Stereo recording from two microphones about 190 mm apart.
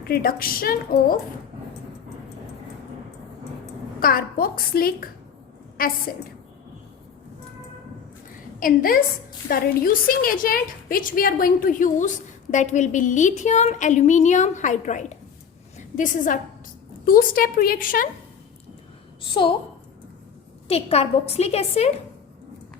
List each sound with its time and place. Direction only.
0.1 s a woman's voice: 50° left (ahead or behind)
4.0 s a woman's voice: 50° left (ahead or behind)
8.6 s a woman's voice: 50° left (ahead or behind)
19.2 s a woman's voice: 25° left (ahead or behind)
20.7 s a woman's voice: 35° left (ahead or behind)